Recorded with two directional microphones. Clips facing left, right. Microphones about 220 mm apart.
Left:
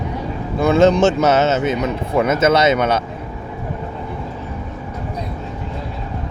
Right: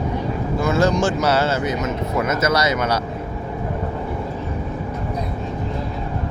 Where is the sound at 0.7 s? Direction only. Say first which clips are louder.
Left 6 dB; 25° left (ahead or behind).